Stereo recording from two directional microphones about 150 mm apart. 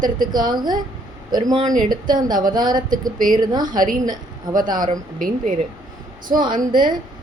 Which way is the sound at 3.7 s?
65° right (ahead or behind).